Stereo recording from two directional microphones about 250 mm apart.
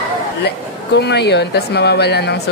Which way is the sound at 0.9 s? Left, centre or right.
Left.